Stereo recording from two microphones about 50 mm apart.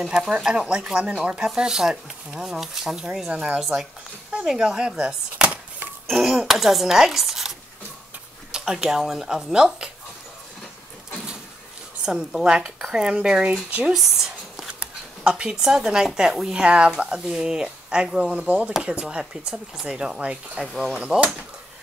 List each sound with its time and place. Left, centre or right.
0.0 s speech: centre
3.3 s speech: right
6.0 s speech: centre
12.0 s speech: centre
13.9 s a sound: centre
14.8 s speech: centre